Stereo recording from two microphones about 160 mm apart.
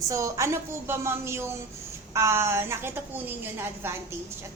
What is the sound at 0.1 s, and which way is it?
A woman's voice, 20° right (ahead or behind).